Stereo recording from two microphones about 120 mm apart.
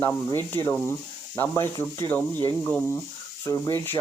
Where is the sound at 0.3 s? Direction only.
20° left (ahead or behind).